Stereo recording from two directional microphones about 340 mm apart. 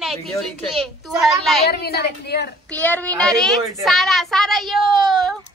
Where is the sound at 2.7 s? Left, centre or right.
Centre.